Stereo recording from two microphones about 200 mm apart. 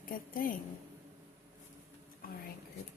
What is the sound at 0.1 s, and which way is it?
Speech, 45° left (ahead or behind).